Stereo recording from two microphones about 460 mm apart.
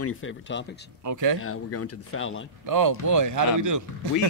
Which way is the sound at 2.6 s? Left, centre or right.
Right.